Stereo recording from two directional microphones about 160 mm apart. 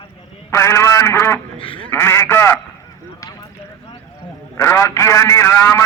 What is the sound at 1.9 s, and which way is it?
Speech, 15° left (ahead or behind).